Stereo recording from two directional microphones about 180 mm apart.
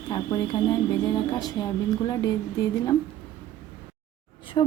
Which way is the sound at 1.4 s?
20° left (ahead or behind).